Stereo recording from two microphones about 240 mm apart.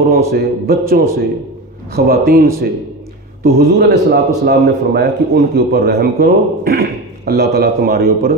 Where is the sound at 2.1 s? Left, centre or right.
Right.